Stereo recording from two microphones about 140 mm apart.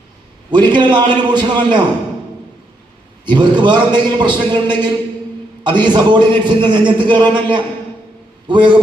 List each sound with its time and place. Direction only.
0.5 s a man's voice: 35° right (ahead or behind)
3.2 s a man's voice: 35° right (ahead or behind)